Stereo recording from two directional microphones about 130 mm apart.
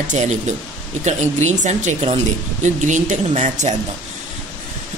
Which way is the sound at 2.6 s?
70° right (ahead or behind).